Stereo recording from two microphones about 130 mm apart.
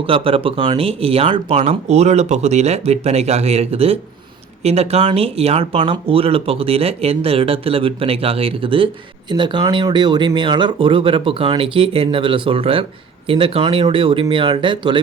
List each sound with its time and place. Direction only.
0.0 s speech: 45° right (ahead or behind)